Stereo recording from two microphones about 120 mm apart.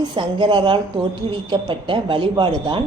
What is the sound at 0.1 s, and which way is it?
A woman's voice, 40° right (ahead or behind).